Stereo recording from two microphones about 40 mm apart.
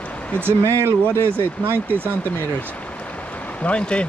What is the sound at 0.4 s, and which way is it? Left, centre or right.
Speech, right.